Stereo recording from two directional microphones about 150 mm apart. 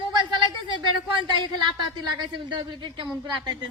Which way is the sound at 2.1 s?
30° right (ahead or behind).